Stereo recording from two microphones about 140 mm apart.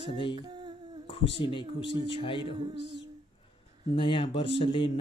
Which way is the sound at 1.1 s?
40° left (ahead or behind).